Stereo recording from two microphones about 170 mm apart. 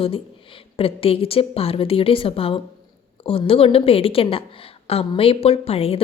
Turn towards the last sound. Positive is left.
turn(degrees=35)  # may be behind; listen again after turning